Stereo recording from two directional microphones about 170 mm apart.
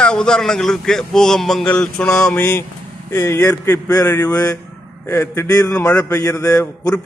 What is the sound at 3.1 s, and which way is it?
A man's voice, 15° left (ahead or behind).